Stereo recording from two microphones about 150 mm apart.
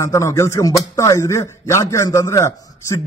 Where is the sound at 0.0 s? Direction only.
20° left (ahead or behind).